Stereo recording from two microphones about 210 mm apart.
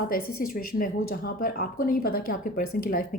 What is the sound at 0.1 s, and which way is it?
Speech, 40° left (ahead or behind).